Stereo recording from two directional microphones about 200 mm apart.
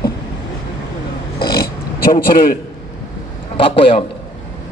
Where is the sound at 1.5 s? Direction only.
45° left (ahead or behind).